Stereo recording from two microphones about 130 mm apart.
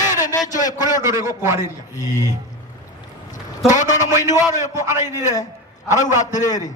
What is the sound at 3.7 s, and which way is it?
Speech, 70° left (ahead or behind).